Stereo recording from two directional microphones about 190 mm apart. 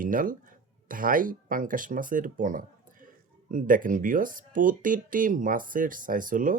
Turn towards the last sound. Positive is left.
turn(degrees=-45)  # may be behind; listen again after turning